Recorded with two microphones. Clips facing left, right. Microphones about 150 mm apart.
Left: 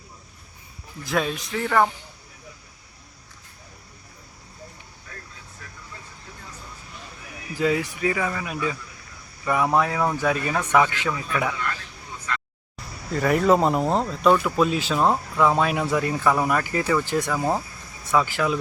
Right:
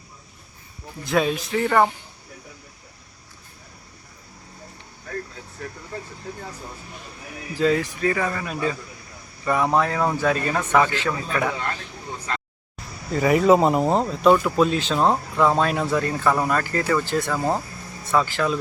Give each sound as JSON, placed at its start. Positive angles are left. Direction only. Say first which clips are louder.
{"t": 1.0, "sound": "speech", "louder": "right 4 dB", "side_deg": 0}
{"t": 6.3, "sound": "speech", "louder": "right 11 dB", "side_deg": -45}
{"t": 7.5, "sound": "speech", "louder": "right 2 dB", "side_deg": 10}
{"t": 10.5, "sound": "speech", "louder": "right 1 dB", "side_deg": -10}
{"t": 10.8, "sound": "speech", "louder": "even", "side_deg": 15}
{"t": 11.5, "sound": "speech", "louder": "right 1 dB", "side_deg": -35}
{"t": 13.1, "sound": "speech", "louder": "right 3 dB", "side_deg": 0}
{"t": 15.5, "sound": "speech", "louder": "right 1 dB", "side_deg": 10}